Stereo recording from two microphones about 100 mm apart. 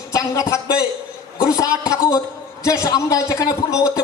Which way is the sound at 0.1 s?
35° left (ahead or behind).